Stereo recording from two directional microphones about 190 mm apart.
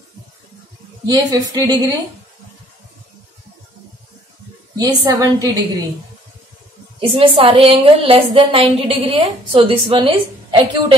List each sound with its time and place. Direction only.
1.0 s a woman's voice: 20° right (ahead or behind)
4.7 s a woman's voice: 20° right (ahead or behind)
7.0 s a woman's voice: 30° right (ahead or behind)